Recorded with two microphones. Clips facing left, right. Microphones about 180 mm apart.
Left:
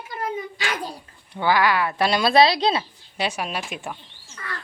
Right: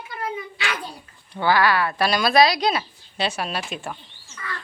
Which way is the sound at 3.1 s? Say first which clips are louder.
Right 1 dB; 10° left (ahead or behind).